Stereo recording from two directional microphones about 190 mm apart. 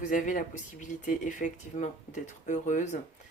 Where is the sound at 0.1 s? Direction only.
40° left (ahead or behind).